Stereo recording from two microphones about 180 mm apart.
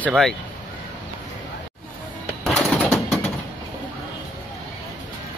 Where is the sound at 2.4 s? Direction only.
Centre (ahead or behind).